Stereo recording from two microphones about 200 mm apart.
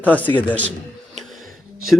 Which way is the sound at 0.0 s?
10° left (ahead or behind).